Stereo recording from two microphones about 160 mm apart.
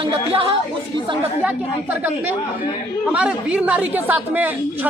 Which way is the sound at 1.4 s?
10° right (ahead or behind).